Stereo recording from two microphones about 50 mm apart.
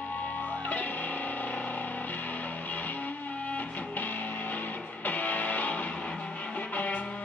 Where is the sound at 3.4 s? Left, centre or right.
Left.